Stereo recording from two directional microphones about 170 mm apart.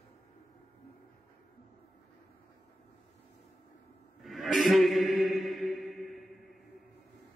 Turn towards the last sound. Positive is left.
turn(degrees=0)  # may be behind; listen again after turning